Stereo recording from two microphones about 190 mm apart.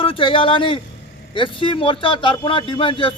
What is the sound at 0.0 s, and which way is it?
Speech, 25° left (ahead or behind).